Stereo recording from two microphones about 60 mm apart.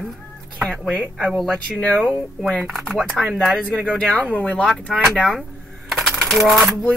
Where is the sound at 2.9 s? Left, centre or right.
Centre.